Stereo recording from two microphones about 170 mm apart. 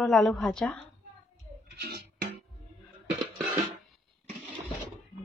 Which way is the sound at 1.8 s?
70° right (ahead or behind).